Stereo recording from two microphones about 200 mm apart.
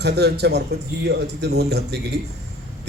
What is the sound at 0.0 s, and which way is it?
A man's voice, 55° right (ahead or behind).